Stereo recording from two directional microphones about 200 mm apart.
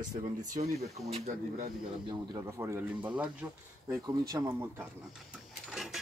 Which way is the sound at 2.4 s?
15° right (ahead or behind).